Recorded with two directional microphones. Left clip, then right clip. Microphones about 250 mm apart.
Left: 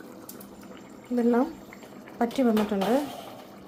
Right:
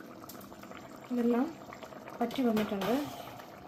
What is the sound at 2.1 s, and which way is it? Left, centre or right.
Speech, centre.